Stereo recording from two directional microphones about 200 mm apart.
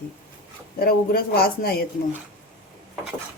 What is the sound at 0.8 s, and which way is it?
Speech, 50° left (ahead or behind).